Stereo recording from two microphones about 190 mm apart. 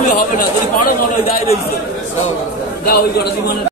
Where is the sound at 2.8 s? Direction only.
50° left (ahead or behind).